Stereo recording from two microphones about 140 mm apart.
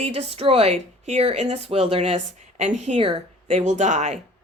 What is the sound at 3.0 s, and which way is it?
A woman's voice, 40° right (ahead or behind).